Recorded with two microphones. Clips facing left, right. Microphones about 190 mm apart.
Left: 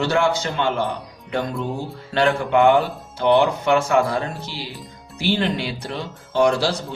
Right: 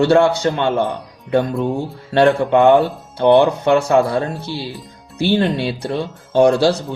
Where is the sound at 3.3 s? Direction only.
70° right (ahead or behind).